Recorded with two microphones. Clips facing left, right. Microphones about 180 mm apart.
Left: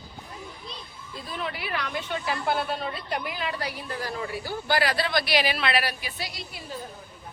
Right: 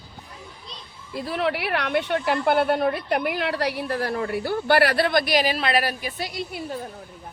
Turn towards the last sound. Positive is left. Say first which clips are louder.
# right 8 dB
turn(degrees=-55)  # may be behind; listen again after turning